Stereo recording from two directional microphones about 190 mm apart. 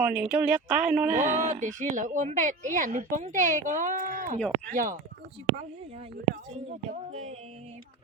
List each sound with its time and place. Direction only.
0.0 s speech: 10° right (ahead or behind)
1.4 s speech: 40° right (ahead or behind)
4.4 s speech: 5° left (ahead or behind)
4.7 s speech: 45° right (ahead or behind)
5.5 s speech: 60° right (ahead or behind)
6.7 s speech: 35° right (ahead or behind)